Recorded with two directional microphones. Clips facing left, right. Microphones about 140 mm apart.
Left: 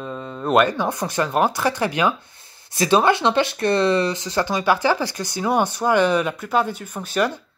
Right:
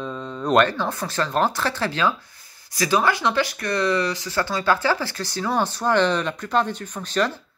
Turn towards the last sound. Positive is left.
turn(degrees=10)  # may be behind; listen again after turning